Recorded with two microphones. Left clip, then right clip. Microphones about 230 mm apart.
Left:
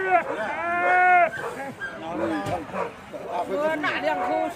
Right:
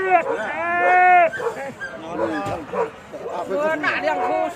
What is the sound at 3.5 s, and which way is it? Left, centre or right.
Chatter, right.